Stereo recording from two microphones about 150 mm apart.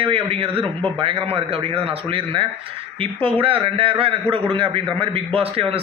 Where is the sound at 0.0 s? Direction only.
35° right (ahead or behind).